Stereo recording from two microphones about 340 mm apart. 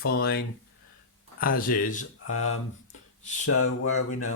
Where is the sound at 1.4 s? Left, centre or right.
Left.